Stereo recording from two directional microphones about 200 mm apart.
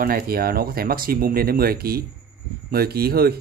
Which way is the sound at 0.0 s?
50° right (ahead or behind).